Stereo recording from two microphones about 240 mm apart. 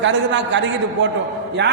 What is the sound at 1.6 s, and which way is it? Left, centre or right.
Speech, right.